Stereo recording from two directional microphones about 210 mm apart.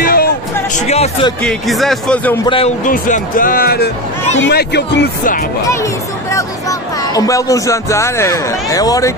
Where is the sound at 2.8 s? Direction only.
40° left (ahead or behind).